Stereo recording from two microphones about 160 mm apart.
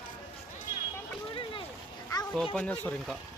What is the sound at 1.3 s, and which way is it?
Speech, 35° left (ahead or behind).